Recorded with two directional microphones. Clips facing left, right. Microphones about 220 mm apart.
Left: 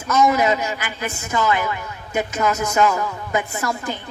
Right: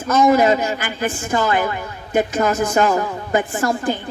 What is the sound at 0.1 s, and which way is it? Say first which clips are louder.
A woman's voice: right 3 dB; 30° right (ahead or behind).